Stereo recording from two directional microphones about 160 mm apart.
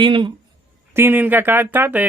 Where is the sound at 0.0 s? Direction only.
30° right (ahead or behind).